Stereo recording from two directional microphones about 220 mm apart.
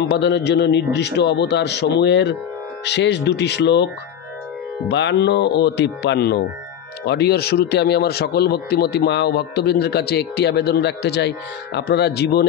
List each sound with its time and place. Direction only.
0.1 s speech: 50° left (ahead or behind)